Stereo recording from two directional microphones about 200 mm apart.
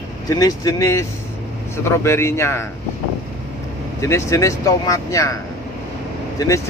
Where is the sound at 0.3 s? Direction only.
15° left (ahead or behind).